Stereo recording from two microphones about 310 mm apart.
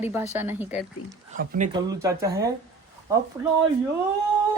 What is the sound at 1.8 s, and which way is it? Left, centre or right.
Speech, centre.